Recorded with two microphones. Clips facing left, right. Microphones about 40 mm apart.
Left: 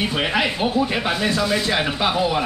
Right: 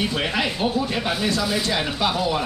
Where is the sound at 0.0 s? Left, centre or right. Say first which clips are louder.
Left 2 dB; left.